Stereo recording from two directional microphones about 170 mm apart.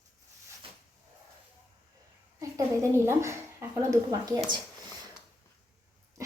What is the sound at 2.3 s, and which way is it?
A woman's voice, 20° right (ahead or behind).